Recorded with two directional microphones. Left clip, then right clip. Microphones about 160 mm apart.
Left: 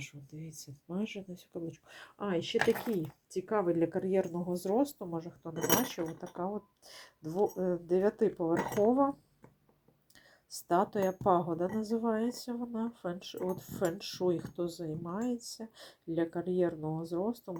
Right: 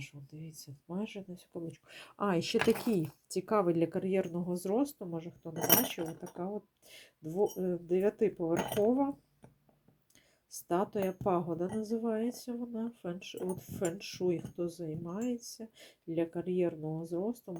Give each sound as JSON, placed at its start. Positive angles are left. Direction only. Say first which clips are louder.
{"t": 0.0, "sound": "speech", "louder": "left 2 dB", "side_deg": 5}
{"t": 1.9, "sound": "speech", "louder": "right 3 dB", "side_deg": -20}
{"t": 10.5, "sound": "speech", "louder": "left 3 dB", "side_deg": 0}